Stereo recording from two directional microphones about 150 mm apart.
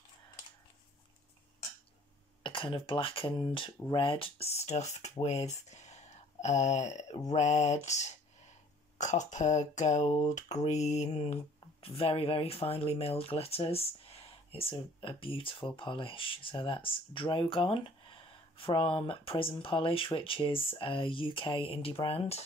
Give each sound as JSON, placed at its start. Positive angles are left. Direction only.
{"t": 2.4, "sound": "speech", "side_deg": 35}